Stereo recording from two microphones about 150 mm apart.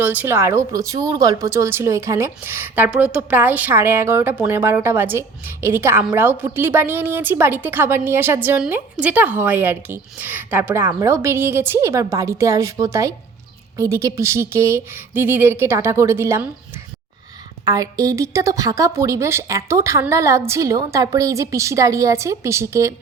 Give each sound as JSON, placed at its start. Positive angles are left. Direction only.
{"t": 0.0, "sound": "a woman's voice", "side_deg": -10}